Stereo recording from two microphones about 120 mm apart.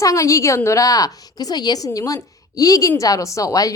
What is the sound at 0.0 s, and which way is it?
A woman's voice, 25° left (ahead or behind).